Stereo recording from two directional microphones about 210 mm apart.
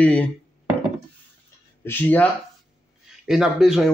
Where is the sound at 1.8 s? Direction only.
10° left (ahead or behind).